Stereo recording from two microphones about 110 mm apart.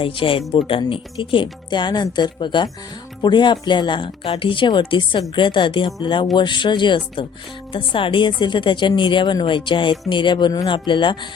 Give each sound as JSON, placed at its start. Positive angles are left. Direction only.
{"t": 0.0, "sound": "speech", "side_deg": 55}